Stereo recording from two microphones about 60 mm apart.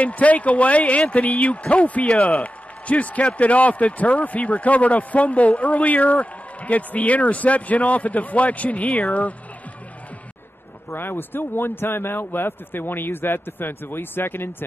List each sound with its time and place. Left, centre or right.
0.0 s a man's voice: left
10.9 s a man's voice: left